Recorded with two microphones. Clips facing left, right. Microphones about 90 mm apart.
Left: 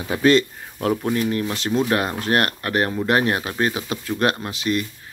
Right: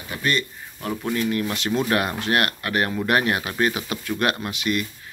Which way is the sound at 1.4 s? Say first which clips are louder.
Left 2 dB; 30° left (ahead or behind).